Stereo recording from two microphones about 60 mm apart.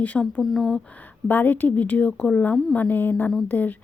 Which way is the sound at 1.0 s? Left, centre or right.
Left.